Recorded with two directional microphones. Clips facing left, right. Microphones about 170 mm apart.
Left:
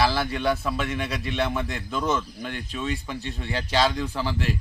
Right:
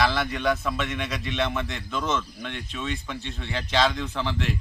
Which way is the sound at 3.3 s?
5° left (ahead or behind).